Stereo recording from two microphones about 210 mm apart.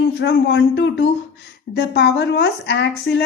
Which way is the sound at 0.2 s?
55° left (ahead or behind).